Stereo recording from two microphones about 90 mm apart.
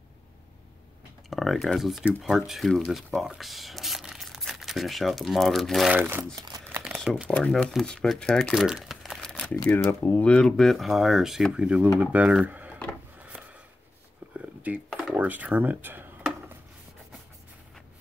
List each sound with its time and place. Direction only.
1.3 s speech: centre (ahead or behind)
5.9 s speech: 25° right (ahead or behind)
7.2 s speech: 10° left (ahead or behind)
8.5 s crumpling: 5° right (ahead or behind)
9.8 s speech: 25° left (ahead or behind)
10.2 s speech: 10° left (ahead or behind); by 12.4 s 15° right (ahead or behind)
12.4 s a sound: 15° right (ahead or behind)
14.3 s a sound: 15° right (ahead or behind)
14.9 s a sound: 5° left (ahead or behind)
15.1 s speech: 15° right (ahead or behind)